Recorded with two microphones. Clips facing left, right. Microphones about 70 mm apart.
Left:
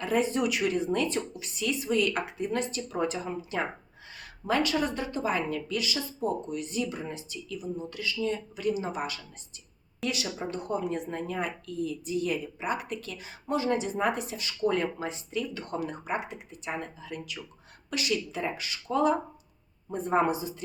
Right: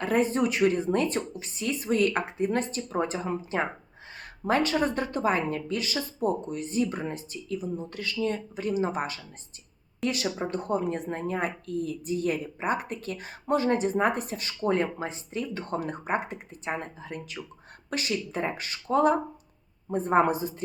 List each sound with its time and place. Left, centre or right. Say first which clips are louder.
0.0 s speech: right 2 dB; right